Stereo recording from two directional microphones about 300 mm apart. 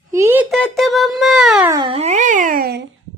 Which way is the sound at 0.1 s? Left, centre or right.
Centre.